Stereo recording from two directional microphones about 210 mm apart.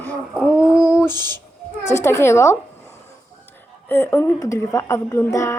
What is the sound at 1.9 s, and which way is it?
Speech, 15° left (ahead or behind).